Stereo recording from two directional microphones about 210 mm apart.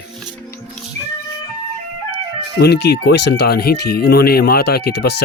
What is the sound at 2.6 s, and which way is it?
Speech, 50° left (ahead or behind).